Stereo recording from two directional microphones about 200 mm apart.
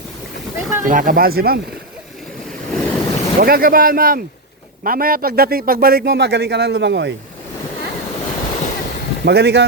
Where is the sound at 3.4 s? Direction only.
45° right (ahead or behind).